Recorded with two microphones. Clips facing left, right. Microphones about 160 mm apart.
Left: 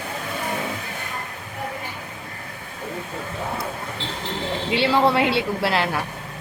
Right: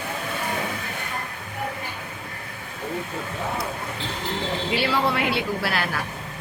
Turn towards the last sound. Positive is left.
turn(degrees=25)  # may be behind; listen again after turning